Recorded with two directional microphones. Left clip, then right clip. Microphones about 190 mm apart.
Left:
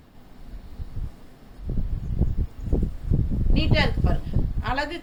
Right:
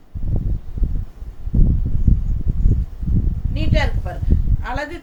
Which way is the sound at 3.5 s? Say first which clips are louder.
Right 1 dB; 15° right (ahead or behind).